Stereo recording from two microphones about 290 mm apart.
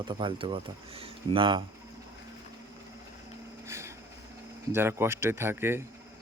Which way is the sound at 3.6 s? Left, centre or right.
Centre.